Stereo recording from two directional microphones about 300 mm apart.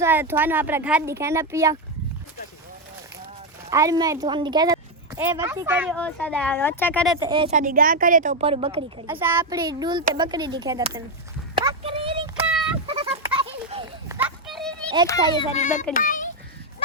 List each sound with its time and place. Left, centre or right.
0.0 s speech: centre
3.7 s speech: centre
7.2 s speech: centre
9.0 s speech: centre
11.6 s a sound: centre
12.4 s a sound: centre
12.9 s goat: centre
14.2 s a sound: centre
15.0 s a child's voice: centre